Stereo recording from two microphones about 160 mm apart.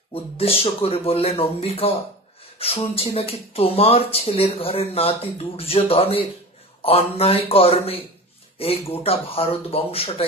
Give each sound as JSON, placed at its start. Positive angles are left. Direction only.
{"t": 0.1, "sound": "speech", "side_deg": 35}